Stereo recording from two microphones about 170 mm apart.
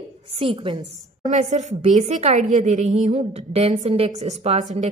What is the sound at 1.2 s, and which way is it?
A woman's voice, 45° right (ahead or behind).